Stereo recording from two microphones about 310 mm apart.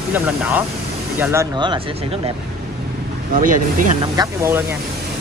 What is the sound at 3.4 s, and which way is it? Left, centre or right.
Speech, right.